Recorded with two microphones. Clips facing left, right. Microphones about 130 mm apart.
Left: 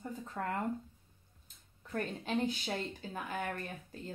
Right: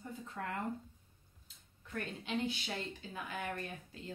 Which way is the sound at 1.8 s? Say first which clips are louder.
Left 5 dB; 40° left (ahead or behind).